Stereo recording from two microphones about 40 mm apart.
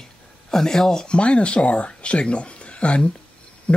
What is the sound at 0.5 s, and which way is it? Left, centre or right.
Speech, centre.